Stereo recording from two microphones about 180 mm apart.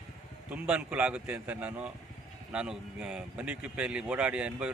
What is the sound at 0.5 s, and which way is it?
A man's voice, 10° right (ahead or behind).